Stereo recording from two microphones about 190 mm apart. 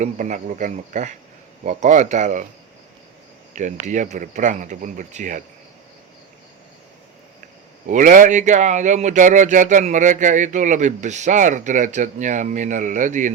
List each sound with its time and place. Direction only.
0.0 s speech: 40° right (ahead or behind)
3.5 s speech: 40° right (ahead or behind)
7.9 s speech: 45° right (ahead or behind)